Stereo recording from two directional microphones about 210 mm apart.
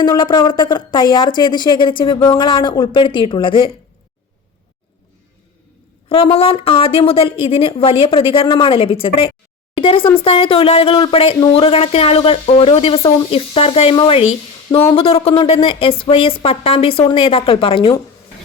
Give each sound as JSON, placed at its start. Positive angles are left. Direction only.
{"t": 0.0, "sound": "speech", "side_deg": 20}
{"t": 6.1, "sound": "speech", "side_deg": 25}